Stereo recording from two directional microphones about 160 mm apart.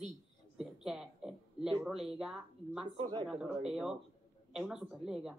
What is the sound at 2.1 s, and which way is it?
Speech, 5° right (ahead or behind).